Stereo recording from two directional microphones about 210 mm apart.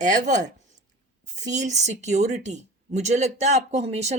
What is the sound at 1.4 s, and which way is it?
Speech, 35° right (ahead or behind).